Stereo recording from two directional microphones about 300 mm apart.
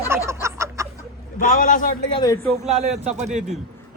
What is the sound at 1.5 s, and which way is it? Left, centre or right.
Speech, left.